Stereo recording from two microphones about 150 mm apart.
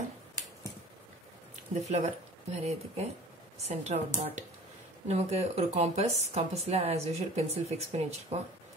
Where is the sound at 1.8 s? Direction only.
50° right (ahead or behind).